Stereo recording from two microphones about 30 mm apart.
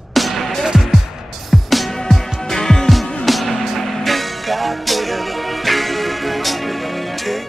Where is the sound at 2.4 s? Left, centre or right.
Centre.